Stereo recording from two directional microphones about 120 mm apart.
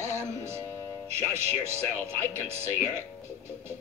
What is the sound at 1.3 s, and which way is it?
Speech, 20° right (ahead or behind).